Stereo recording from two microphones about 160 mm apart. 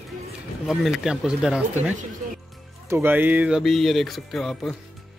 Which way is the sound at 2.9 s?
10° right (ahead or behind).